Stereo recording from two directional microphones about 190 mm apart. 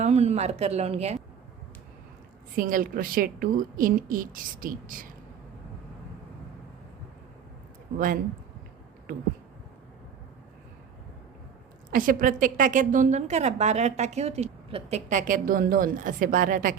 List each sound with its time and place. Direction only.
0.0 s speech: 35° right (ahead or behind)
2.6 s a woman's voice: 45° right (ahead or behind)
7.9 s a woman's voice: 45° right (ahead or behind)
11.9 s a woman's voice: 45° right (ahead or behind)